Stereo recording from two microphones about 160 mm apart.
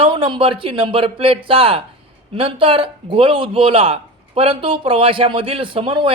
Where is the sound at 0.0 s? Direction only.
30° right (ahead or behind).